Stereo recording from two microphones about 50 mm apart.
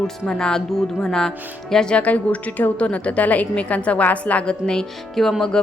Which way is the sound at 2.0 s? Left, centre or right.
Left.